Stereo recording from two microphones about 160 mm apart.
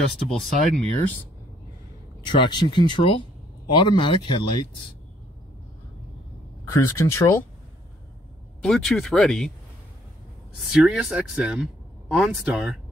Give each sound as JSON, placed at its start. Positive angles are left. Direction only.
{"t": 0.0, "sound": "speech", "side_deg": 0}
{"t": 2.2, "sound": "speech", "side_deg": 30}
{"t": 6.7, "sound": "speech", "side_deg": 15}
{"t": 8.6, "sound": "speech", "side_deg": 5}
{"t": 10.6, "sound": "speech", "side_deg": -5}